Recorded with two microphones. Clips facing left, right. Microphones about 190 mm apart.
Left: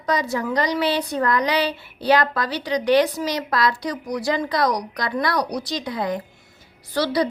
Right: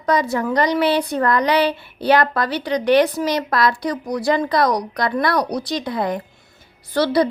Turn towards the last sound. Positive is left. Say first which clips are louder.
# right 4 dB
turn(degrees=-55)  # may be behind; listen again after turning